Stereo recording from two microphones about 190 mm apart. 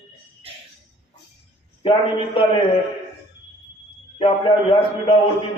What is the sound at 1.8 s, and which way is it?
Speech, 25° left (ahead or behind).